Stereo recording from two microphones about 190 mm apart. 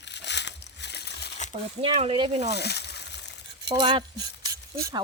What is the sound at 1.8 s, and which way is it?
Speech, 30° right (ahead or behind).